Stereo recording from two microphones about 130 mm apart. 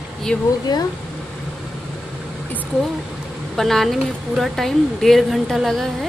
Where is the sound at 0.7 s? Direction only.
35° left (ahead or behind).